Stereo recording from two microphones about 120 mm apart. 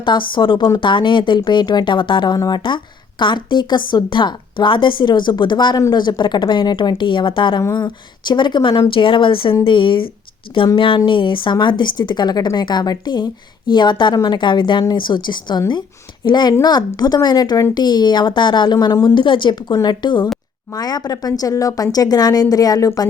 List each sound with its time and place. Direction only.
0.0 s speech: 40° left (ahead or behind)